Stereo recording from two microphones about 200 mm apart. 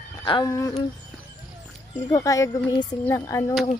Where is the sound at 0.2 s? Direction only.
20° left (ahead or behind).